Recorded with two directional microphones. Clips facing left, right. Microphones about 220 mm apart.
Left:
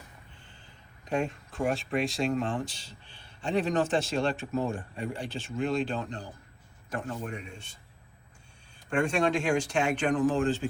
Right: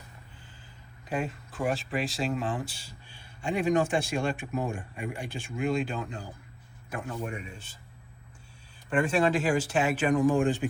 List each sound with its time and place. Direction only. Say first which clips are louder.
1.0 s speech: left 2 dB; 5° right (ahead or behind)
8.9 s speech: right 1 dB; 5° right (ahead or behind)